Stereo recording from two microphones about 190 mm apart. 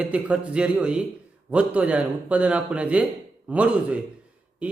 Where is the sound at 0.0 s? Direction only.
5° right (ahead or behind).